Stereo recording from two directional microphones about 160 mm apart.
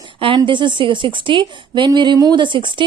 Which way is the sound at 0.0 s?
30° right (ahead or behind).